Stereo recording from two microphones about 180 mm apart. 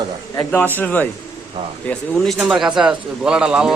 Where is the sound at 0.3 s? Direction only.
10° left (ahead or behind).